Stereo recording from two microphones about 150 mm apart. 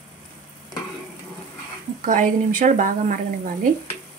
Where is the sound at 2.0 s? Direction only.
60° right (ahead or behind).